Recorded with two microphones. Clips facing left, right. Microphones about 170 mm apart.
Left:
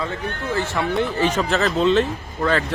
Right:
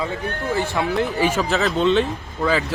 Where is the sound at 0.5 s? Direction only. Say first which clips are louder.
Even; 15° right (ahead or behind).